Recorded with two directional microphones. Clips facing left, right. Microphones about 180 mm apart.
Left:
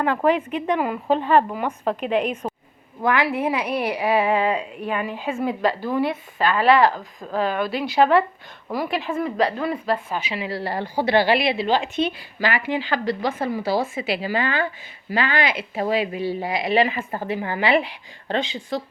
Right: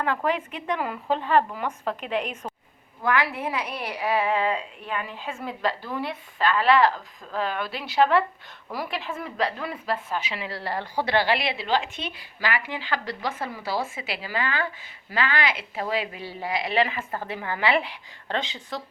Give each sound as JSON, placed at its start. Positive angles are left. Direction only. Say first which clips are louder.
{"t": 0.3, "sound": "a woman's voice", "louder": "left 7 dB", "side_deg": 20}
{"t": 13.2, "sound": "speech", "louder": "left 7 dB", "side_deg": 40}
{"t": 14.1, "sound": "a woman's voice", "louder": "left 7 dB", "side_deg": 25}
{"t": 17.0, "sound": "a woman's voice", "louder": "left 4 dB", "side_deg": 30}
{"t": 17.2, "sound": "a woman's voice", "louder": "left 4 dB", "side_deg": 15}